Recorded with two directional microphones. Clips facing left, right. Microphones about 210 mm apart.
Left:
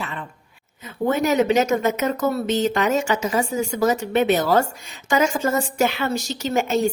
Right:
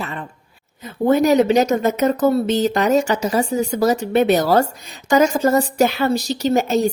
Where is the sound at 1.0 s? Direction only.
35° right (ahead or behind).